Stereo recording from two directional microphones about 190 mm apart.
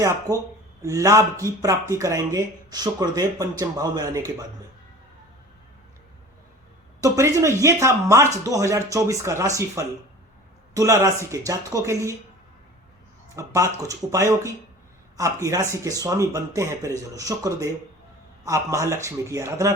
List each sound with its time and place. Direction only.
0.3 s a man's voice: 20° right (ahead or behind)
7.0 s speech: 15° right (ahead or behind)
13.3 s speech: 15° right (ahead or behind)